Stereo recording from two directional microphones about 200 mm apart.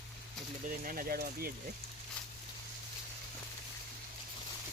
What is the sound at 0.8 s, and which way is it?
Speech, 45° right (ahead or behind).